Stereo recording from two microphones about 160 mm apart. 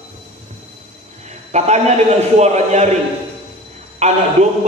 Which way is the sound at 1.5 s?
45° right (ahead or behind).